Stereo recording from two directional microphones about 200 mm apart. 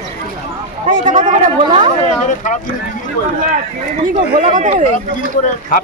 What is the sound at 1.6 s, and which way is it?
Speech, 25° right (ahead or behind).